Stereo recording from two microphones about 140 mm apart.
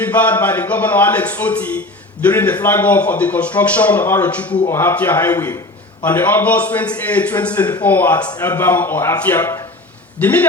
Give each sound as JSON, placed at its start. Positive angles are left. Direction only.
{"t": 0.0, "sound": "a man's voice", "side_deg": 10}